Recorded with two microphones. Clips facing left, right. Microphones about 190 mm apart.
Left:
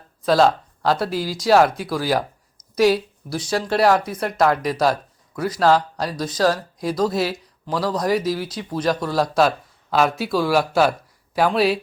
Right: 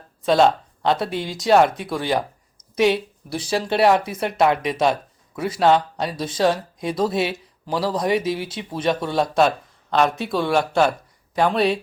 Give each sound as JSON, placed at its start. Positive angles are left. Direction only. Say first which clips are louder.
{"t": 0.3, "sound": "speech", "louder": "even", "side_deg": 0}
{"t": 6.2, "sound": "speech", "louder": "even", "side_deg": -25}
{"t": 6.5, "sound": "speech", "louder": "left 1 dB", "side_deg": 0}